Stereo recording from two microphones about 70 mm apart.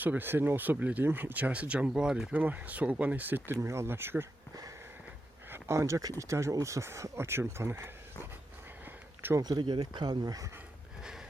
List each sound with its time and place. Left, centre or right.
0.0 s speech: right; by 2.3 s centre
2.3 s speech: right
5.5 s speech: right
9.4 s speech: right